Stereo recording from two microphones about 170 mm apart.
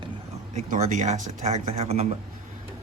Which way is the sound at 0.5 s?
50° right (ahead or behind).